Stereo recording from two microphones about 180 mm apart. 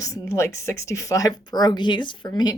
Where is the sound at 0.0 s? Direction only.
20° left (ahead or behind).